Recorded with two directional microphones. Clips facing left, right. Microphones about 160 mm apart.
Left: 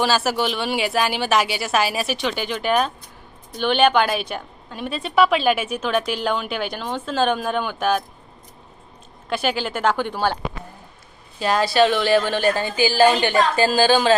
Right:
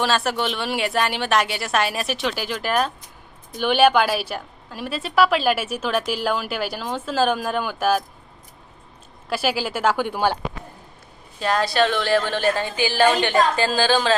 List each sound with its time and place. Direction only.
0.0 s a woman's voice: 5° left (ahead or behind)
9.3 s speech: 5° right (ahead or behind)
11.3 s a woman's voice: 5° left (ahead or behind)
12.9 s a woman's voice: 30° left (ahead or behind)
13.2 s a woman's voice: 5° left (ahead or behind)